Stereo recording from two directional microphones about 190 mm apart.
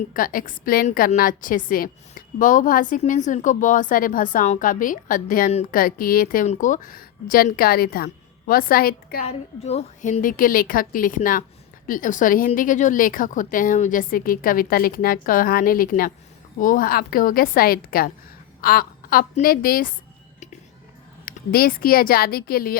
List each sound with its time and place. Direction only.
0.1 s a woman's voice: 45° left (ahead or behind)
9.2 s a woman's voice: 35° left (ahead or behind)
21.2 s a woman's voice: 50° left (ahead or behind)